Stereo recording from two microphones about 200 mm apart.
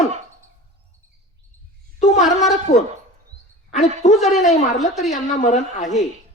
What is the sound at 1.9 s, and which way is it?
Speech, 35° left (ahead or behind).